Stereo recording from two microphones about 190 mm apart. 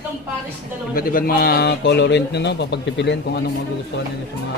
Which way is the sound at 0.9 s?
50° left (ahead or behind).